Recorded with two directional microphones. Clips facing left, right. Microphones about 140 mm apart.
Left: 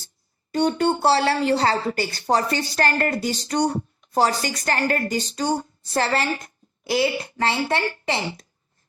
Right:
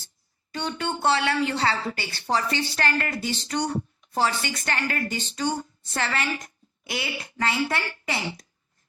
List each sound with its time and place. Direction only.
0.5 s a woman's voice: 45° left (ahead or behind); by 8.4 s 25° left (ahead or behind)